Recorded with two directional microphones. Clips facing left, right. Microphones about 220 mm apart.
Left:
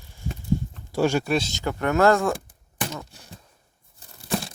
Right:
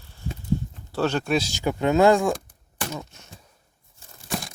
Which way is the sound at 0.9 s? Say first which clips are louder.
Left 2 dB; 10° left (ahead or behind).